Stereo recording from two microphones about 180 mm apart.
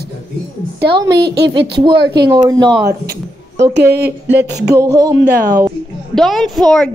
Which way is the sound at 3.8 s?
65° right (ahead or behind).